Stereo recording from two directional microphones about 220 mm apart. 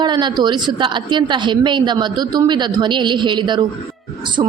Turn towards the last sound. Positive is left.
turn(degrees=-20)  # may be behind; listen again after turning